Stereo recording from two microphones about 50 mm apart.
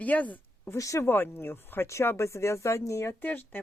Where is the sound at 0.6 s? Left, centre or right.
Left.